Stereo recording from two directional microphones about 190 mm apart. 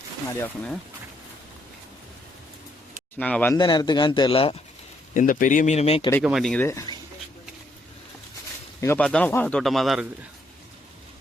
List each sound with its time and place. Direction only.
0.3 s speech: 10° left (ahead or behind)
3.2 s speech: 10° left (ahead or behind)
3.5 s speech: 25° left (ahead or behind)
5.1 s speech: 45° left (ahead or behind)
6.2 s speech: centre (ahead or behind); by 6.9 s 15° left (ahead or behind)
8.8 s speech: 15° left (ahead or behind)